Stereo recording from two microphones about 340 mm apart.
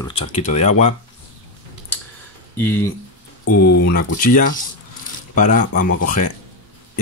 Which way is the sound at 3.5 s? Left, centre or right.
Left.